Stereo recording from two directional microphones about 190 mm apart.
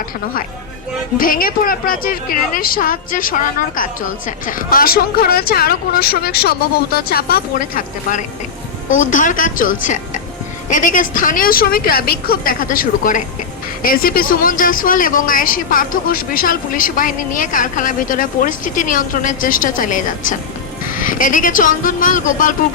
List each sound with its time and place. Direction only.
1.2 s a woman's voice: 50° left (ahead or behind)